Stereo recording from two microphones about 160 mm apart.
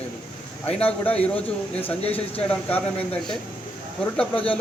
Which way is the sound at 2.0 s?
40° left (ahead or behind).